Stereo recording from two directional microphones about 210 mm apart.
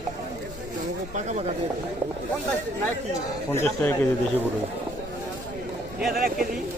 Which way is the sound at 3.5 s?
10° left (ahead or behind).